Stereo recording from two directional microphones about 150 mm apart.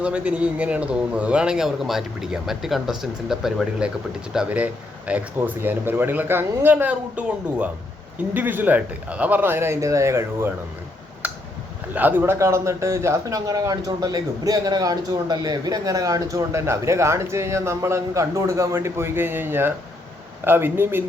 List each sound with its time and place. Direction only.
0.0 s a man's voice: 10° right (ahead or behind)
11.2 s tick: 10° right (ahead or behind)
11.9 s a man's voice: 10° right (ahead or behind)